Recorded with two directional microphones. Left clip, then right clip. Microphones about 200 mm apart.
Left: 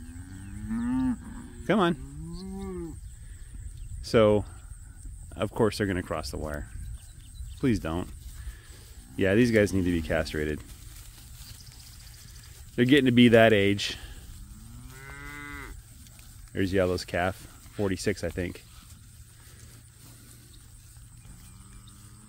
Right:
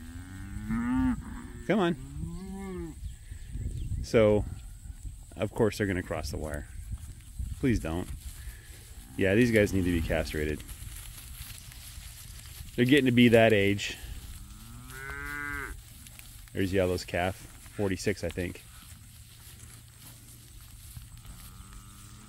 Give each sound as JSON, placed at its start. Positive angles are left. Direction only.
{"t": 0.2, "sound": "cattle", "side_deg": 15}
{"t": 2.5, "sound": "cattle", "side_deg": -35}
{"t": 4.0, "sound": "speech", "side_deg": 10}
{"t": 9.1, "sound": "speech", "side_deg": 10}
{"t": 12.7, "sound": "speech", "side_deg": 10}
{"t": 14.9, "sound": "moo", "side_deg": 30}
{"t": 16.5, "sound": "speech", "side_deg": 10}